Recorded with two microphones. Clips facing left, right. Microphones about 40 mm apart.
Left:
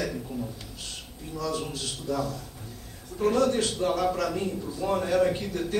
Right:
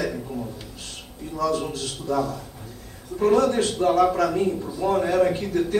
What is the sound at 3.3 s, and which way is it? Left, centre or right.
Speech, right.